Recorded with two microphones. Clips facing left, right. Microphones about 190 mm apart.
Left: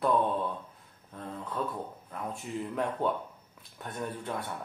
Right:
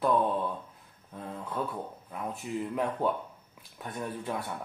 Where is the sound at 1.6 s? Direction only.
5° right (ahead or behind).